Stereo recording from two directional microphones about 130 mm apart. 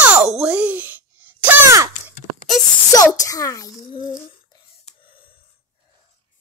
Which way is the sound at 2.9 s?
25° left (ahead or behind).